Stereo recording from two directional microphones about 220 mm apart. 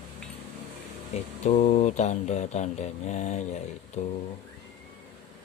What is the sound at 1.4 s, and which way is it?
Speech, 30° left (ahead or behind).